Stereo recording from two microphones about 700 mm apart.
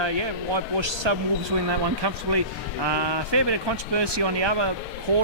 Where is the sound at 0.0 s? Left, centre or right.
Right.